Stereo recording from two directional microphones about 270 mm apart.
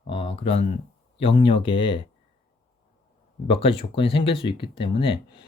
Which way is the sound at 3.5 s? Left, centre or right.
Left.